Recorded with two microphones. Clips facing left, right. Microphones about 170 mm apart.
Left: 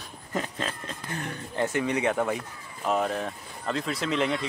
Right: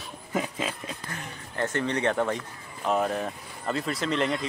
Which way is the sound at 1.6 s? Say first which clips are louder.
Left 1 dB; 10° left (ahead or behind).